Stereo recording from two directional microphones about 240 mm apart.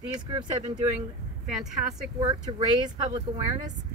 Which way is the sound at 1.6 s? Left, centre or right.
Centre.